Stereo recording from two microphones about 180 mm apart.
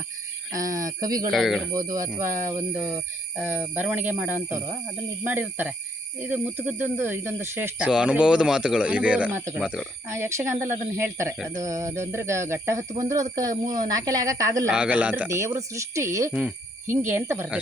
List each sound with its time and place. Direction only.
0.5 s speech: 20° right (ahead or behind)
1.3 s speech: centre (ahead or behind)
1.7 s speech: 20° right (ahead or behind); by 9.8 s centre (ahead or behind)
10.2 s speech: 15° right (ahead or behind)
14.7 s speech: 5° right (ahead or behind)